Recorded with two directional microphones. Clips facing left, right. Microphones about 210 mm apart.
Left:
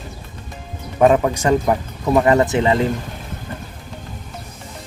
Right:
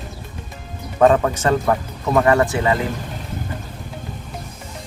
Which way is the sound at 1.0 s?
15° left (ahead or behind).